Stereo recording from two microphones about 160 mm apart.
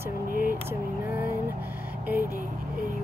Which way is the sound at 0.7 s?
15° right (ahead or behind).